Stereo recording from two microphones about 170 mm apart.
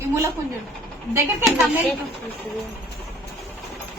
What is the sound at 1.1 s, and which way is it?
Speech, 15° right (ahead or behind).